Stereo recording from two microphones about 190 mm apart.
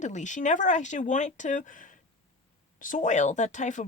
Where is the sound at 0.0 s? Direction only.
40° left (ahead or behind).